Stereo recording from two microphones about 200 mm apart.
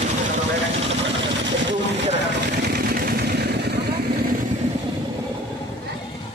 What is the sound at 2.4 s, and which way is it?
Vehicle, 55° right (ahead or behind).